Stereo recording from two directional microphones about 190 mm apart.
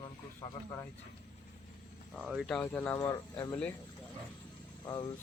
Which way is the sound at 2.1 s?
Centre (ahead or behind).